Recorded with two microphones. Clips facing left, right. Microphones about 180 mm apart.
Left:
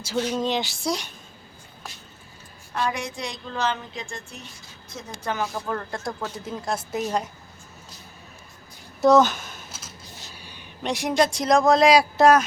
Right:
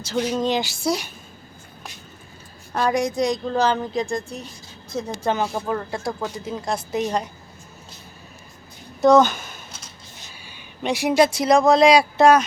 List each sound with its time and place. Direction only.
0.3 s a woman's voice: centre (ahead or behind)
2.7 s a woman's voice: 40° right (ahead or behind)
5.6 s speech: 10° right (ahead or behind)
6.4 s a woman's voice: centre (ahead or behind)
9.0 s a sound: 5° left (ahead or behind)
10.3 s speech: centre (ahead or behind)